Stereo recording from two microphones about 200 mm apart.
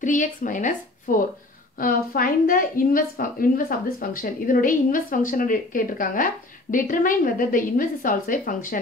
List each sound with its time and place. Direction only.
0.0 s speech: 40° left (ahead or behind)